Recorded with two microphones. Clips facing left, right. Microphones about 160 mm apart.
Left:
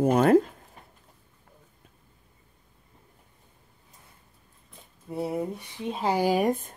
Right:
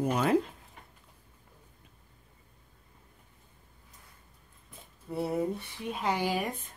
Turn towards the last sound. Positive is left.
turn(degrees=45)  # may be behind; listen again after turning